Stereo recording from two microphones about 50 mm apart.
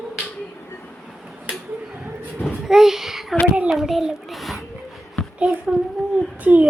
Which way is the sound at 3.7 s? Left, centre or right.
Centre.